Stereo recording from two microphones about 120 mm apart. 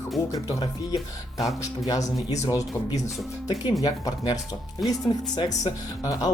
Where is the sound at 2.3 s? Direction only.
30° left (ahead or behind).